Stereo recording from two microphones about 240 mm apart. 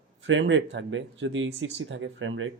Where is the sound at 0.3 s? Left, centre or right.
Right.